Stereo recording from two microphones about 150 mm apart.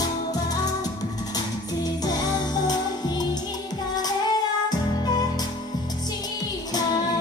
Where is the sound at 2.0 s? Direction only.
25° left (ahead or behind).